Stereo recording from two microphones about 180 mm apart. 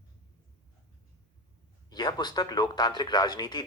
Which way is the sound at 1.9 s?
25° left (ahead or behind).